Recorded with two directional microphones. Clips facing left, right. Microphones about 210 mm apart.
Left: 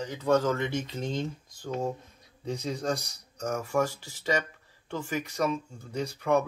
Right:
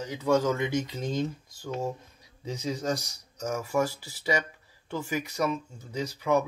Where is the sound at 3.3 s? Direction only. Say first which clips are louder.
Even; 5° right (ahead or behind).